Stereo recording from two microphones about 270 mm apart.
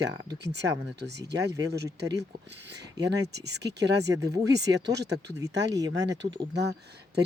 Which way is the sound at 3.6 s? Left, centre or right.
Right.